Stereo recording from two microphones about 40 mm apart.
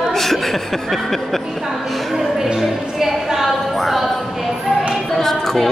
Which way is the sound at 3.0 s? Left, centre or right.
Centre.